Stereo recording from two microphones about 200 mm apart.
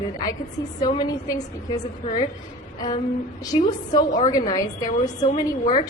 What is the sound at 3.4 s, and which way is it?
A woman's voice, 20° left (ahead or behind).